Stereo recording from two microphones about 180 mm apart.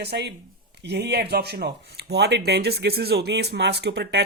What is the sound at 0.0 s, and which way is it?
Speech, 70° right (ahead or behind).